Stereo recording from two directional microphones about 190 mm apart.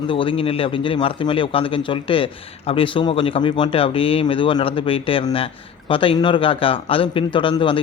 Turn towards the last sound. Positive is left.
turn(degrees=25)  # may be behind; listen again after turning